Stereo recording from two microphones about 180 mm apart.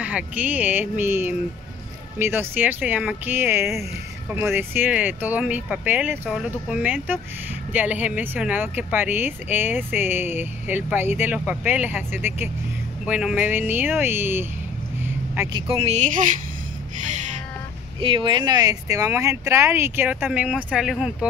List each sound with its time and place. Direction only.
0.0 s speech: 10° right (ahead or behind)
15.5 s speech: 35° right (ahead or behind)
18.0 s speech: 30° right (ahead or behind); by 21.3 s centre (ahead or behind)